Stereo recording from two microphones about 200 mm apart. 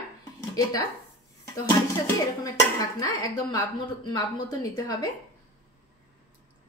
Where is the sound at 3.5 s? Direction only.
20° left (ahead or behind).